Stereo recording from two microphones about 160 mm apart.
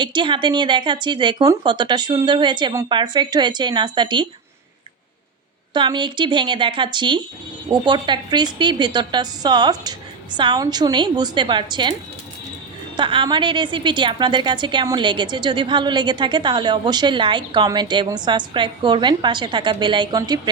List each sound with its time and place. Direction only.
0.0 s a woman's voice: 30° right (ahead or behind)
5.7 s a woman's voice: 30° right (ahead or behind)
13.0 s a woman's voice: 30° right (ahead or behind)